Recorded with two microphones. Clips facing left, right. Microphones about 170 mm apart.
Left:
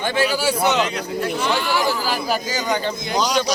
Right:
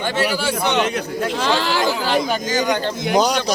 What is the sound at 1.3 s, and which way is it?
Speech, 90° right.